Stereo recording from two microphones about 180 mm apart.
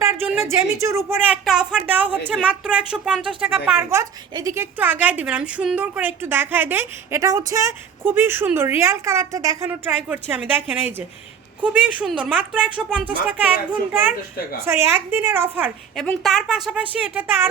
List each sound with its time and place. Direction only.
0.0 s a sound: 15° right (ahead or behind)
0.4 s a woman's voice: 15° right (ahead or behind)
16.0 s a woman's voice: centre (ahead or behind)